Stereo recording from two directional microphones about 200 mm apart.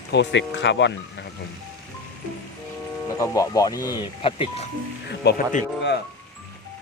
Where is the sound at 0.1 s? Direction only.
60° left (ahead or behind).